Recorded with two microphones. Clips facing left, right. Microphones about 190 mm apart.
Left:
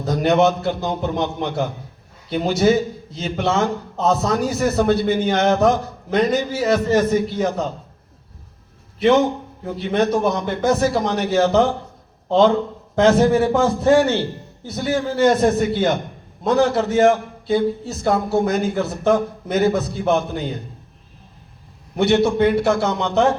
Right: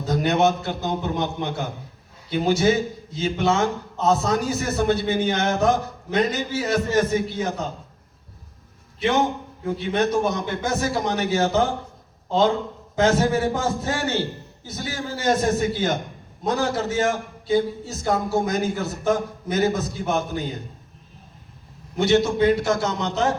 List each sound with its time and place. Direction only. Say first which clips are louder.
0.0 s a man's voice: left 4 dB; 60° left (ahead or behind)
9.0 s a man's voice: left 6 dB; 60° left (ahead or behind)
21.9 s a man's voice: left 3 dB; 60° left (ahead or behind)